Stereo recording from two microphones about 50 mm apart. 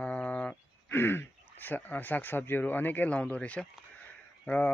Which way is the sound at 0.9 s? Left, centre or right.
Left.